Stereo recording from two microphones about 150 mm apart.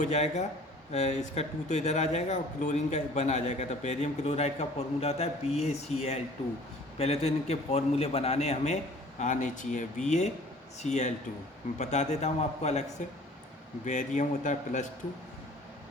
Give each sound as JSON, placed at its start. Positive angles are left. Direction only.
{"t": 0.0, "sound": "speech", "side_deg": 50}
{"t": 13.8, "sound": "speech", "side_deg": 55}